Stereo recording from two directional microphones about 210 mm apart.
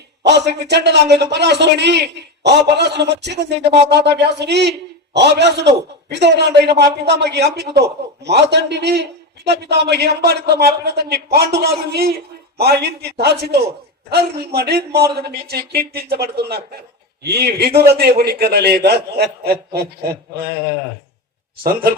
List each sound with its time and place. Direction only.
0.2 s a man's voice: 55° right (ahead or behind)
21.6 s a man's voice: 45° right (ahead or behind)